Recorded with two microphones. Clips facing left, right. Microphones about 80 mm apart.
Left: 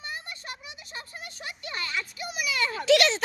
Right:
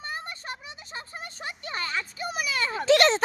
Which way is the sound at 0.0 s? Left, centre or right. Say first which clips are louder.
Right 3 dB; right.